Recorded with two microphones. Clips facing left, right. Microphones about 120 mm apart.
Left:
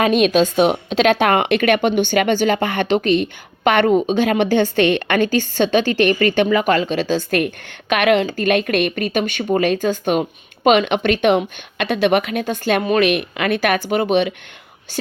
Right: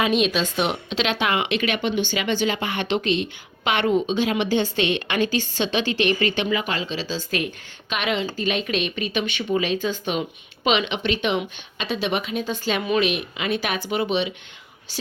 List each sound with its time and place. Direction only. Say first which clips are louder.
0.0 s a woman's voice: left 7 dB; 50° left (ahead or behind)